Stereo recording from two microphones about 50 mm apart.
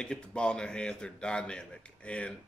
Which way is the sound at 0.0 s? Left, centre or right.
Left.